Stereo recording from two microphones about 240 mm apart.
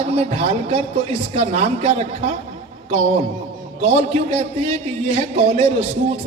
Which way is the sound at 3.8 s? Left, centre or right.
Right.